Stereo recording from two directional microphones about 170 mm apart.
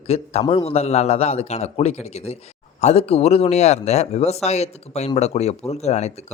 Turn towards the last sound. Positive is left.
turn(degrees=40)  # may be behind; listen again after turning